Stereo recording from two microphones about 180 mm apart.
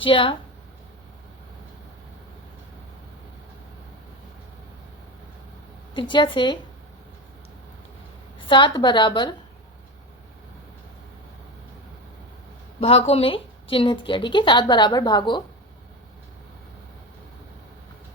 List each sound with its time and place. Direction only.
0.0 s a woman's voice: 30° left (ahead or behind)
5.9 s a woman's voice: 25° left (ahead or behind)
8.4 s a woman's voice: 25° left (ahead or behind)
12.8 s a woman's voice: 35° left (ahead or behind)